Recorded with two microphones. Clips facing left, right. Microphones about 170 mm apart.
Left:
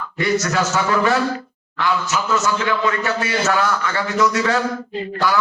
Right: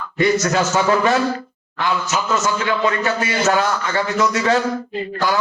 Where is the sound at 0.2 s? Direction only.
20° right (ahead or behind).